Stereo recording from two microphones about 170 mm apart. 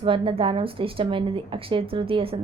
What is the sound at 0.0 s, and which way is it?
Speech, 30° right (ahead or behind).